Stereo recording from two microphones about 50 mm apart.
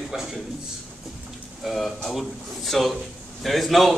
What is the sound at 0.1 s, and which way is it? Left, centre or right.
Speech, centre.